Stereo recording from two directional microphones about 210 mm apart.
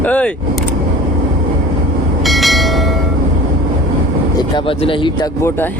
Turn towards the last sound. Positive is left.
turn(degrees=25)  # may be behind; listen again after turning